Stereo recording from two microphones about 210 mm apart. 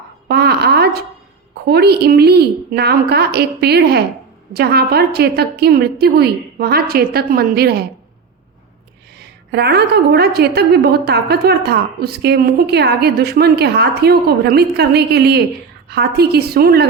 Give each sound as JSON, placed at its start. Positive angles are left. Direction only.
{"t": 0.3, "sound": "a sound", "side_deg": -50}
{"t": 1.6, "sound": "a woman's voice", "side_deg": -50}
{"t": 9.1, "sound": "a woman's voice", "side_deg": -50}